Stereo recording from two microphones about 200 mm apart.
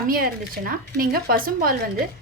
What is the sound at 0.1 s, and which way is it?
A woman's voice, 45° right (ahead or behind).